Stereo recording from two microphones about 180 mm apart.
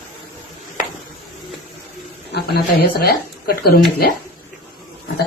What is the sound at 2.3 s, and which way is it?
Speech, 60° left (ahead or behind).